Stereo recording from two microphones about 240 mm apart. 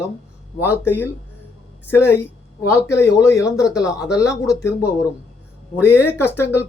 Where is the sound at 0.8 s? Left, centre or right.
Centre.